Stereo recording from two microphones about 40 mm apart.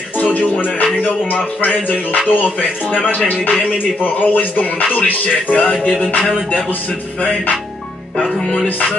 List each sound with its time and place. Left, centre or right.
0.5 s speech: left
4.0 s speech: left
5.6 s music: left